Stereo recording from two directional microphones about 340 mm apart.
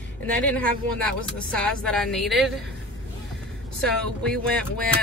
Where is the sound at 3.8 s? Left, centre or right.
Centre.